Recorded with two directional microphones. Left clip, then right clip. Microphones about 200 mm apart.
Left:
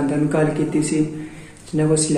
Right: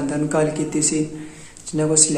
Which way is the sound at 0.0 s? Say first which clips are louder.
Left 1 dB; 15° right (ahead or behind).